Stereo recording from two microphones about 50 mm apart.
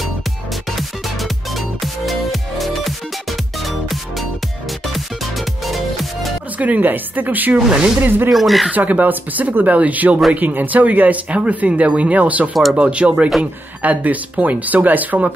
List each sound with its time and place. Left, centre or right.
0.7 s music: centre
6.6 s speech: right
7.5 s speech: centre
8.0 s speech: right
8.3 s speech: centre
8.7 s speech: right